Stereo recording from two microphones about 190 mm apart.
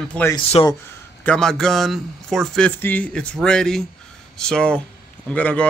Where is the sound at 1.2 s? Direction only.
5° left (ahead or behind).